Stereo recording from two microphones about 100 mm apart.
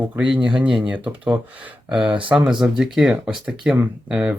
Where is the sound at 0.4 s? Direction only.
10° right (ahead or behind).